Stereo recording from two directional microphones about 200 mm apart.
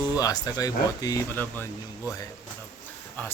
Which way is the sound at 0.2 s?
15° left (ahead or behind).